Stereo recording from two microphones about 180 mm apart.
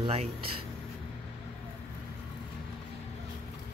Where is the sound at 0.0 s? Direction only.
30° right (ahead or behind).